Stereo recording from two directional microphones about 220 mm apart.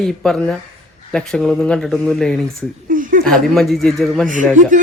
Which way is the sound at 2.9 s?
35° right (ahead or behind).